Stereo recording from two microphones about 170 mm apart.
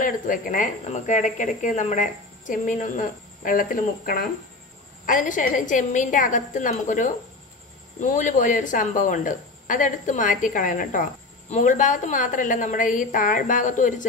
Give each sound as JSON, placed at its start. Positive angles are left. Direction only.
{"t": 0.0, "sound": "speech", "side_deg": 50}